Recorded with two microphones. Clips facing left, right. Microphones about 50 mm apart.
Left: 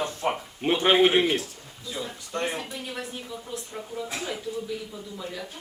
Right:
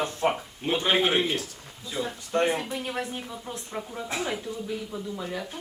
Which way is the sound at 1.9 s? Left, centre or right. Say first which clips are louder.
Right 5 dB; right.